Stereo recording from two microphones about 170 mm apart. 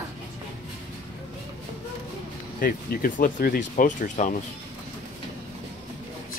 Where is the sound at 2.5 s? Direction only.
55° left (ahead or behind).